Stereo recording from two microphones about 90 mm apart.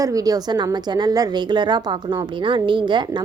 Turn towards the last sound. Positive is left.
turn(degrees=-60)  # may be behind; listen again after turning